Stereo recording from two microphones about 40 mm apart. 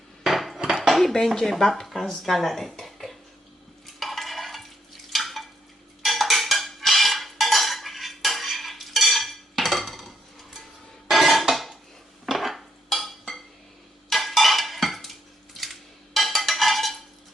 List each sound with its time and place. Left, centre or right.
0.2 s dishes: centre
1.1 s speech: centre
3.8 s stir: centre
5.1 s a sound: centre
6.0 s cutlery: centre
11.1 s dishes: centre
14.1 s stir: centre
15.5 s dishes: centre